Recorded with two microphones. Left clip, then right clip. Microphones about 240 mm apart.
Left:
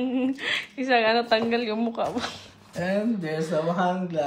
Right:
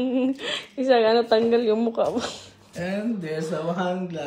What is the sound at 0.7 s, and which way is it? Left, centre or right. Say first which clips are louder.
A woman's voice: right 4 dB; right.